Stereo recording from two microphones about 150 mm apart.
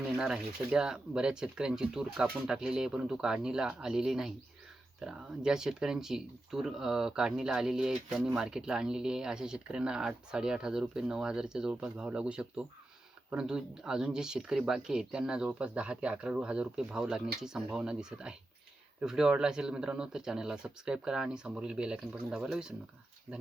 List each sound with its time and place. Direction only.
0.2 s speech: 5° right (ahead or behind)